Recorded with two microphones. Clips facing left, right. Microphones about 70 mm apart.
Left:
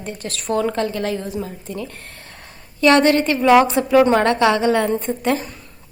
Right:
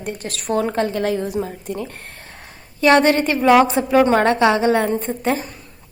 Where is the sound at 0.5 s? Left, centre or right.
Right.